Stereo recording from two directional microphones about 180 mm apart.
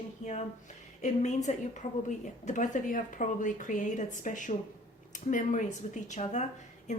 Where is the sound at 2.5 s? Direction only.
45° left (ahead or behind).